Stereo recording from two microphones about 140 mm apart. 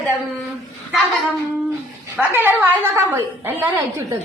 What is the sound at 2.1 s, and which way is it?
A woman's voice, 15° right (ahead or behind).